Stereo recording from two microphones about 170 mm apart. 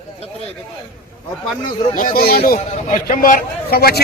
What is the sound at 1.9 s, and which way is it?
A man's voice, 55° left (ahead or behind).